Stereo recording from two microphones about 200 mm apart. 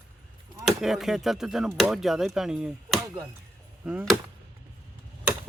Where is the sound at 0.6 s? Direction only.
Centre (ahead or behind).